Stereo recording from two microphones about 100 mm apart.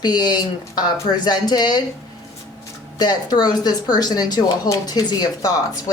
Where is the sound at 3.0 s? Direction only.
45° left (ahead or behind).